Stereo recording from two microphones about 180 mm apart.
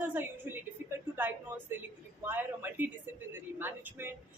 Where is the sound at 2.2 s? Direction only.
10° right (ahead or behind).